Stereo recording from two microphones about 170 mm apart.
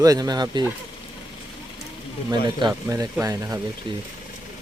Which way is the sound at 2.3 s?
25° right (ahead or behind).